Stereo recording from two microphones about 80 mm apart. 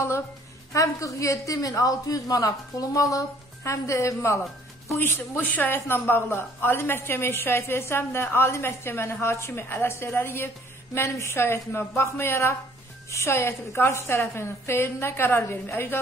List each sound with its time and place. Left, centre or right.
0.7 s a woman's voice: left
4.9 s a woman's voice: left